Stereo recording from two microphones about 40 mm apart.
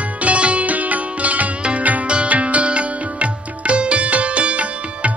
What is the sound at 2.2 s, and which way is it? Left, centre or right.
Sitar, right.